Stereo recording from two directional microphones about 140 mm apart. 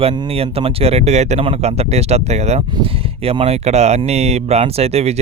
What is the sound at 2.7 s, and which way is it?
Speech, 40° right (ahead or behind).